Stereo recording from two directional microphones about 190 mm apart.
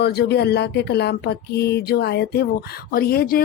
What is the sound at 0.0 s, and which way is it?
Speech, 55° left (ahead or behind).